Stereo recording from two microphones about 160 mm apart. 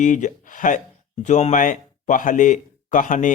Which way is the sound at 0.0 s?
50° left (ahead or behind).